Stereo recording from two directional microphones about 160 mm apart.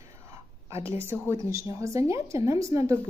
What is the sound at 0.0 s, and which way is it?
Whispering, 20° right (ahead or behind).